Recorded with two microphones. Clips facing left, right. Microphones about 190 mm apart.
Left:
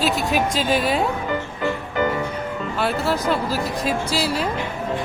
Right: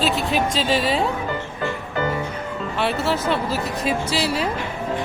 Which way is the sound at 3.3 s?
Centre (ahead or behind).